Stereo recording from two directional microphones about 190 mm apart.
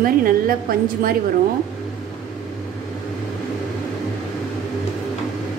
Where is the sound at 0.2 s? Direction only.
50° right (ahead or behind).